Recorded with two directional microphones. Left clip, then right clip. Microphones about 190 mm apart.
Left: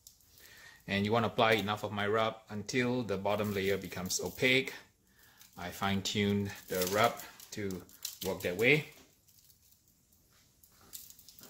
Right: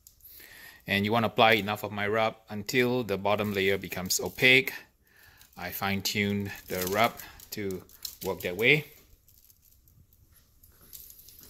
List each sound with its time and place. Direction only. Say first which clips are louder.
0.7 s speech: right 5 dB; 50° right (ahead or behind)
5.6 s speech: right 4 dB; 35° right (ahead or behind)